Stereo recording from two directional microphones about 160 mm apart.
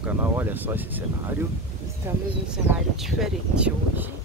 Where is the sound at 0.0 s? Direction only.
10° right (ahead or behind).